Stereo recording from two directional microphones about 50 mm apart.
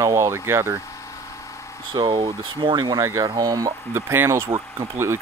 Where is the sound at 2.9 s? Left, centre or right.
Right.